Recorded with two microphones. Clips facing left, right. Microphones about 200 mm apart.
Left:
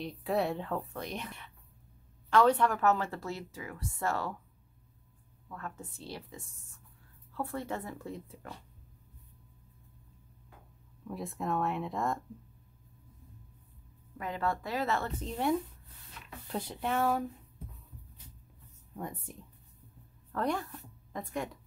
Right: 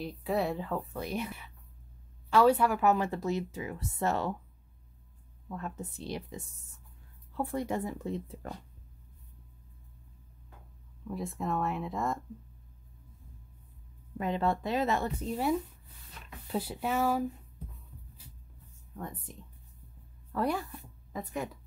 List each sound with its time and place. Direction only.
0.0 s speech: centre (ahead or behind); by 4.4 s 20° right (ahead or behind)
5.5 s speech: 20° right (ahead or behind)
11.1 s speech: centre (ahead or behind)
14.1 s speech: 25° right (ahead or behind); by 17.3 s 5° right (ahead or behind)
18.9 s speech: 10° left (ahead or behind)
20.3 s speech: 5° right (ahead or behind)